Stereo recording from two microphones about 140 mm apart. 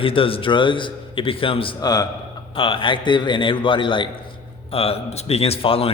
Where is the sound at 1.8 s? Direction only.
30° left (ahead or behind).